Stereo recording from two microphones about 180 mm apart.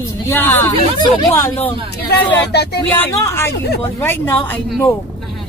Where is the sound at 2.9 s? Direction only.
15° left (ahead or behind).